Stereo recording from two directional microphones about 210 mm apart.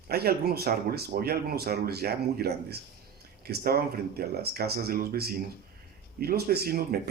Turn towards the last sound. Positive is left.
turn(degrees=-45)  # may be behind; listen again after turning